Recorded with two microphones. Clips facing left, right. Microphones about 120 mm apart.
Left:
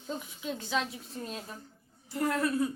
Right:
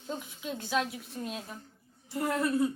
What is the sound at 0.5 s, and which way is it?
A woman's voice, 15° right (ahead or behind).